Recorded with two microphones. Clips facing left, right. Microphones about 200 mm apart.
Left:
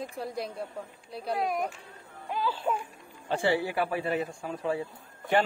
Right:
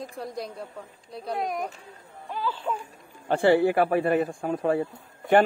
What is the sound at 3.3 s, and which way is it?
A man's voice, 60° right (ahead or behind).